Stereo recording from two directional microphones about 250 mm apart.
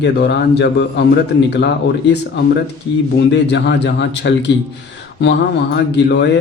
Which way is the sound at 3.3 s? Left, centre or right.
Left.